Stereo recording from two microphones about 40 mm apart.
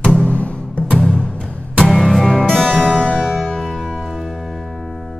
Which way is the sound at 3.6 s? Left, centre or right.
Centre.